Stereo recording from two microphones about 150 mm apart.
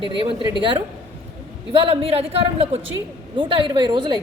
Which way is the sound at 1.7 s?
40° right (ahead or behind).